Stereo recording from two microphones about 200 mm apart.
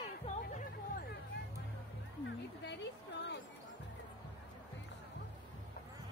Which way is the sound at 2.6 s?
60° left (ahead or behind).